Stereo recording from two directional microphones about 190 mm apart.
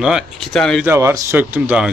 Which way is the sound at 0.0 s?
Centre (ahead or behind).